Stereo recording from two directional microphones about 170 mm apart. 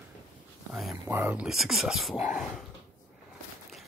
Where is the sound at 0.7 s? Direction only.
Centre (ahead or behind).